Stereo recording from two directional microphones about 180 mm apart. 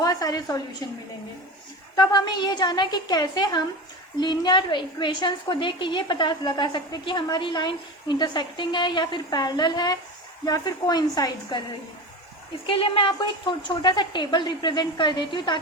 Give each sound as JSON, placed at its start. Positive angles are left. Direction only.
{"t": 0.0, "sound": "a woman's voice", "side_deg": 20}
{"t": 2.0, "sound": "a woman's voice", "side_deg": 25}
{"t": 12.6, "sound": "a woman's voice", "side_deg": 30}